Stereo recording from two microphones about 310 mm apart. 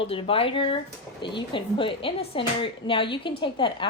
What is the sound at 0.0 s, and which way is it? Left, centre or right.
Speech, centre.